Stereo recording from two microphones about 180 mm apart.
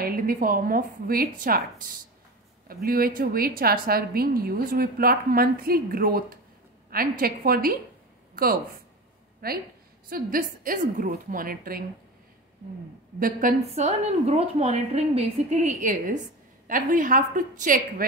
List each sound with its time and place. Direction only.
0.0 s a woman's voice: 50° right (ahead or behind)
13.2 s a woman's voice: 50° right (ahead or behind)